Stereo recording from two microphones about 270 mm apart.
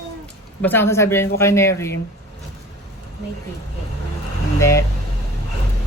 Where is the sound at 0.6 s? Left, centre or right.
Centre.